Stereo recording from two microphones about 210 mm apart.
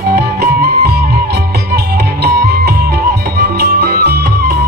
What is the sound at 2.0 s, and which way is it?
Music, 50° right (ahead or behind).